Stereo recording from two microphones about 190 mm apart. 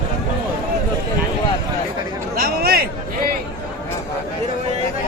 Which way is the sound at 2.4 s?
55° right (ahead or behind).